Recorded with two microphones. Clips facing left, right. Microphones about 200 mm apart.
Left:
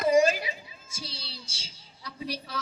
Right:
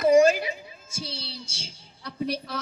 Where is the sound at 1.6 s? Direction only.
55° right (ahead or behind).